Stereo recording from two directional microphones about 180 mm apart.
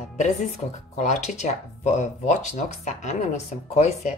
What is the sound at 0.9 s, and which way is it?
A woman's voice, 40° left (ahead or behind).